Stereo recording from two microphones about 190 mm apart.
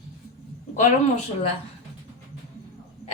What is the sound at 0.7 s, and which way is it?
Speech, 35° left (ahead or behind).